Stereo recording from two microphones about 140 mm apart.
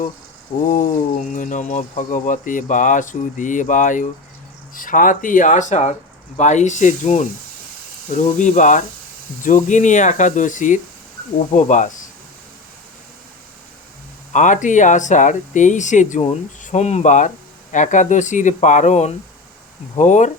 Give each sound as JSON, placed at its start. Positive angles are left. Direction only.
{"t": 0.7, "sound": "speech", "side_deg": 65}
{"t": 14.3, "sound": "speech", "side_deg": 65}